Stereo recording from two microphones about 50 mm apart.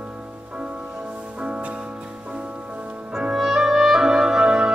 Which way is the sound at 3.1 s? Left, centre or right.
Centre.